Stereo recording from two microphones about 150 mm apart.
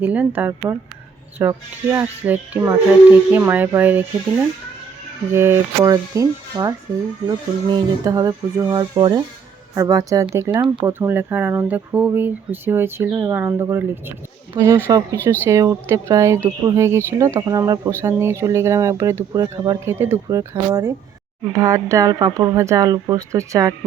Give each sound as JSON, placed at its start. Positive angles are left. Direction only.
{"t": 0.0, "sound": "speech", "side_deg": -10}
{"t": 10.8, "sound": "speech", "side_deg": -15}